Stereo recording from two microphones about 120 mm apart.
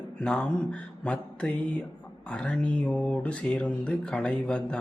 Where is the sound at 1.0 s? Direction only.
10° left (ahead or behind).